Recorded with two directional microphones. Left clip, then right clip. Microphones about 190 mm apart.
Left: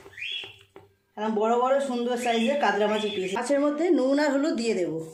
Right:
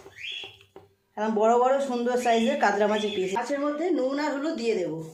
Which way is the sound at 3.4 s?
50° left (ahead or behind).